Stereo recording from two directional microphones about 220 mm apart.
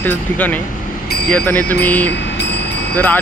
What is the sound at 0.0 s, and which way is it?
Speech, 10° left (ahead or behind).